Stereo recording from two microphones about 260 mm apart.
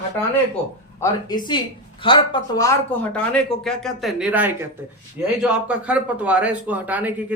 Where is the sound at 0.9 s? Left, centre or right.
Centre.